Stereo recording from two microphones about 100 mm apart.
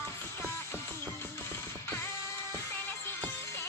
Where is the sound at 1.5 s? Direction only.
25° left (ahead or behind).